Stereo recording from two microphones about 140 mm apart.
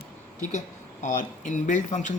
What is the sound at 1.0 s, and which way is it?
Speech, 60° left (ahead or behind).